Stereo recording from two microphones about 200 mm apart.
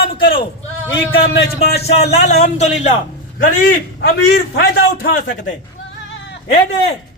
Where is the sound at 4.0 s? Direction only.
60° left (ahead or behind); by 5.5 s 45° left (ahead or behind).